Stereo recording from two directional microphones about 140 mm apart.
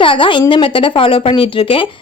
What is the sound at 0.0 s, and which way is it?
A woman's voice, 40° left (ahead or behind).